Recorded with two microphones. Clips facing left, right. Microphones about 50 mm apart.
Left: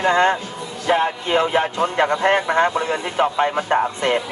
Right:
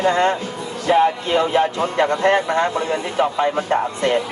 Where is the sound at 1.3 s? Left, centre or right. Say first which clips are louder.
Left 2 dB; left.